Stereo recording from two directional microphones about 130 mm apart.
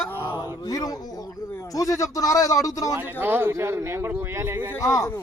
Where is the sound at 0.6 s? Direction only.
30° left (ahead or behind).